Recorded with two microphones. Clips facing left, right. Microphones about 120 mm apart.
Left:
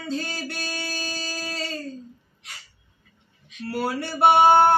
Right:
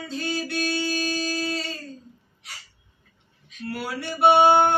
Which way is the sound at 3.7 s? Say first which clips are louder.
Left 5 dB; 40° left (ahead or behind).